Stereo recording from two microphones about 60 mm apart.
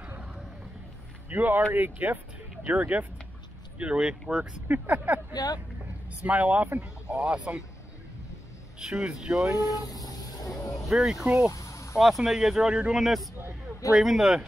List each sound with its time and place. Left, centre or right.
0.0 s a sound: right
1.3 s speech: right
4.6 s speech: right
5.3 s speech: left
6.2 s speech: right
7.1 s speech: centre
8.7 s speech: centre
9.6 s vehicle: left
10.9 s speech: centre
11.3 s a sound: left
12.0 s speech: centre
13.0 s a man's voice: centre